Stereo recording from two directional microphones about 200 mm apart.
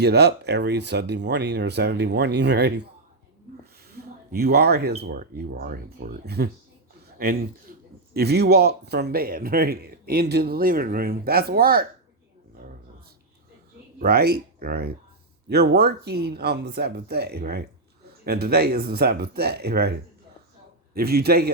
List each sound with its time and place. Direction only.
0.0 s speech: 55° right (ahead or behind)
3.8 s a sound: 50° right (ahead or behind)
4.9 s a man's voice: 45° right (ahead or behind)
7.7 s a sound: 45° right (ahead or behind)
8.1 s a man's voice: 55° right (ahead or behind)
14.0 s a man's voice: 50° right (ahead or behind)
20.9 s a man's voice: 50° right (ahead or behind)